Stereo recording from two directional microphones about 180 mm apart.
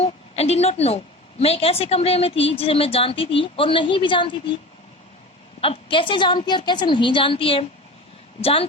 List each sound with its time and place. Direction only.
0.0 s a woman's voice: 35° left (ahead or behind)
5.5 s a woman's voice: 30° left (ahead or behind)